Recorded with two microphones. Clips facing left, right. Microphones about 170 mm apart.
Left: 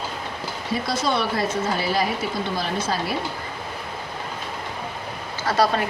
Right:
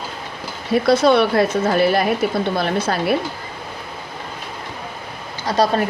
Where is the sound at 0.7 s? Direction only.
65° right (ahead or behind).